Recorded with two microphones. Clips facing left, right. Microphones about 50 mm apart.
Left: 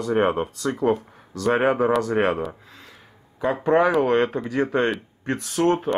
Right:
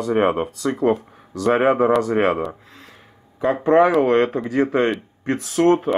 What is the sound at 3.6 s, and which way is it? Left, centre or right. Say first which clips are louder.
Speech: right 4 dB; right.